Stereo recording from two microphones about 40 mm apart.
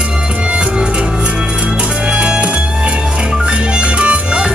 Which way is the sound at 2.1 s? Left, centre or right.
Right.